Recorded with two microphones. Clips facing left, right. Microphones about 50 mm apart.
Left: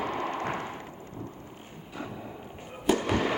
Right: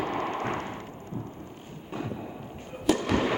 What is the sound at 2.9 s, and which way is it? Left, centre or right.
Fireworks, centre.